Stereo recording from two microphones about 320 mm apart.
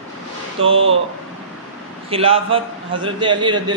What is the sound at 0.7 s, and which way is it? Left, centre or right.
Speech, right.